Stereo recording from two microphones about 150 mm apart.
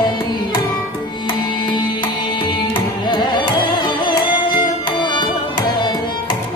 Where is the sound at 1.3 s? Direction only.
30° left (ahead or behind).